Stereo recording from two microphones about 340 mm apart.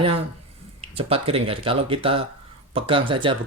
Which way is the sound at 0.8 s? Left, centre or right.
Centre.